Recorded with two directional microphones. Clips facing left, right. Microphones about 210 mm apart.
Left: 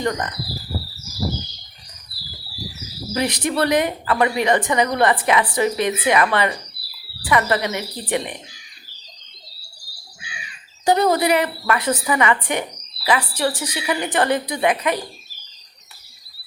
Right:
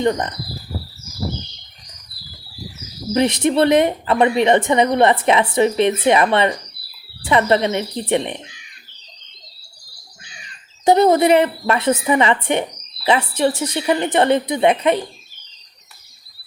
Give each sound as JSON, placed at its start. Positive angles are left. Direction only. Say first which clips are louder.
{"t": 0.0, "sound": "a woman's voice", "louder": "right 5 dB", "side_deg": -25}
{"t": 0.9, "sound": "a sound", "louder": "even", "side_deg": 5}
{"t": 2.1, "sound": "bird", "louder": "left 1 dB", "side_deg": 5}
{"t": 3.2, "sound": "a woman's voice", "louder": "right 5 dB", "side_deg": -25}
{"t": 6.8, "sound": "bird", "louder": "right 2 dB", "side_deg": -25}
{"t": 7.5, "sound": "a woman's voice", "louder": "right 5 dB", "side_deg": -25}
{"t": 8.4, "sound": "crow", "louder": "right 2 dB", "side_deg": -60}
{"t": 10.2, "sound": "bird", "louder": "left 4 dB", "side_deg": 10}
{"t": 10.8, "sound": "a woman's voice", "louder": "right 4 dB", "side_deg": -25}